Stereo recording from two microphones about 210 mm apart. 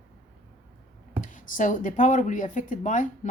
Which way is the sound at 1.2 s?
40° left (ahead or behind).